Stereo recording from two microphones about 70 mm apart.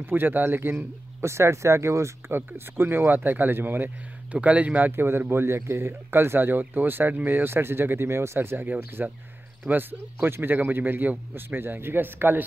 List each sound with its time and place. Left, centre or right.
0.0 s speech: right
1.2 s speech: right
4.3 s speech: centre